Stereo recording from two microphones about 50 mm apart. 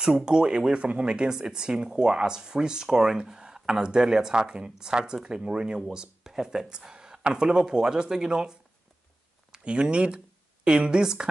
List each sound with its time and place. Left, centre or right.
0.0 s speech: centre